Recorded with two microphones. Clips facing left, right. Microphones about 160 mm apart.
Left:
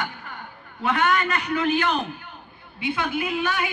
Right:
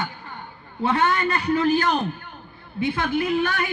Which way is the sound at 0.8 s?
30° right (ahead or behind).